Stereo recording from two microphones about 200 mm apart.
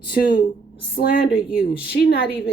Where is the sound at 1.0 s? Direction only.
45° left (ahead or behind).